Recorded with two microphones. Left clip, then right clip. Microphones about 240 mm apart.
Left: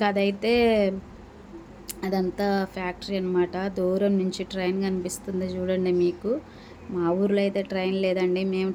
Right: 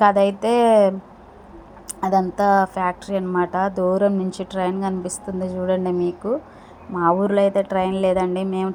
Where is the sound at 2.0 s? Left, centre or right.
Centre.